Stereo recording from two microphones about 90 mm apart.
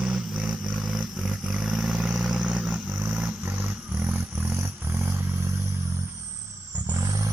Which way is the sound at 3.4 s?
15° right (ahead or behind).